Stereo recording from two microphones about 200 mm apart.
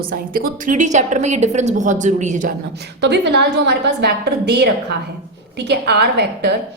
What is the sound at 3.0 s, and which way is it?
A woman's voice, 60° right (ahead or behind).